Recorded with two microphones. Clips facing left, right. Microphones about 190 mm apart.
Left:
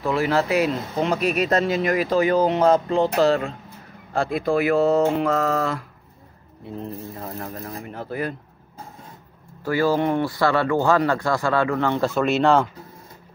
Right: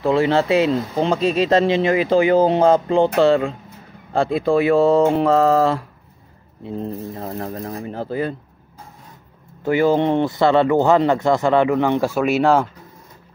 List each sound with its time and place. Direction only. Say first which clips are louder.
0.0 s speech: right 4 dB; 30° right (ahead or behind)
9.6 s speech: right 4 dB; 20° right (ahead or behind)